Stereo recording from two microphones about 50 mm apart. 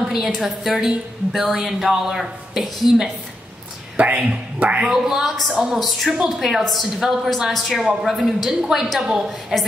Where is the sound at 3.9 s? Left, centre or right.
Right.